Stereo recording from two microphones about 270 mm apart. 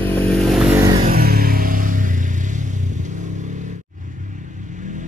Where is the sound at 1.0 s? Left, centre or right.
Right.